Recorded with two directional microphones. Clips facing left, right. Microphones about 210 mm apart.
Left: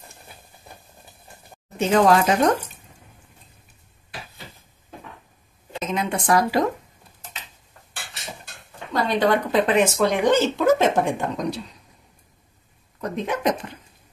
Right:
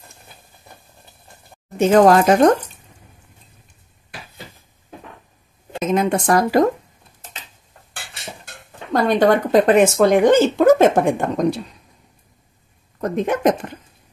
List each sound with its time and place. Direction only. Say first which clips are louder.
1.8 s speech: right 5 dB; 50° right (ahead or behind)
5.9 s speech: right 4 dB; 40° right (ahead or behind)
8.9 s speech: right 5 dB; 50° right (ahead or behind)
13.0 s speech: right 6 dB; 50° right (ahead or behind)